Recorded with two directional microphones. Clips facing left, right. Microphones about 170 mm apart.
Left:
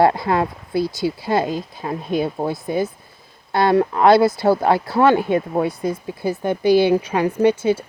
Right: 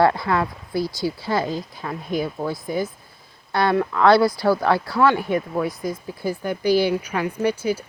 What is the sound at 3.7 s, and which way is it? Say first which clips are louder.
Speech: left 5 dB; 35° left (ahead or behind).